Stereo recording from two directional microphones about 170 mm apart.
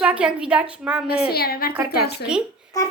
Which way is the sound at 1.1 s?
65° left (ahead or behind).